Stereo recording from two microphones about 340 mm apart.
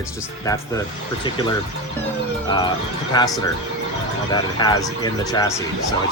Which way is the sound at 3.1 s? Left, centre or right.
Centre.